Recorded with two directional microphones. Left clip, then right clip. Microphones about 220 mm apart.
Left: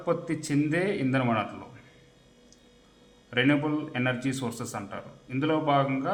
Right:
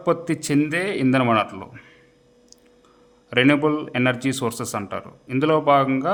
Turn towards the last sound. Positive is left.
turn(degrees=-55)  # may be behind; listen again after turning